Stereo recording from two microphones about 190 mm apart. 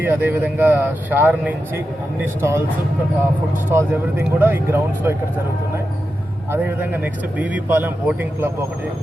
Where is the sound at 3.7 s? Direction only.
10° right (ahead or behind).